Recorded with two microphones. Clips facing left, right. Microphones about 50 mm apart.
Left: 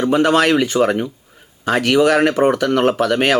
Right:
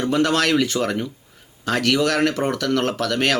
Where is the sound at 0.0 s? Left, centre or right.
Centre.